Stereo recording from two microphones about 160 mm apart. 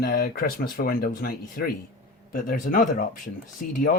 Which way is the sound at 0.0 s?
65° left (ahead or behind).